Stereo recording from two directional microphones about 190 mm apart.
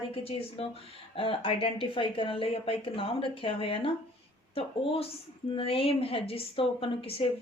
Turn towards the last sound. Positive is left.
turn(degrees=30)  # may be behind; listen again after turning